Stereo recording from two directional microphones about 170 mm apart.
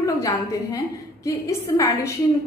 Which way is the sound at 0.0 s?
20° left (ahead or behind).